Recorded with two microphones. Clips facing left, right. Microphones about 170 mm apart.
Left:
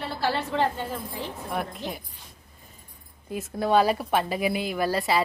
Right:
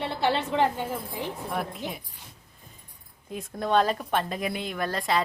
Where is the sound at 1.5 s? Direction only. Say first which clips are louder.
Left 1 dB; centre (ahead or behind).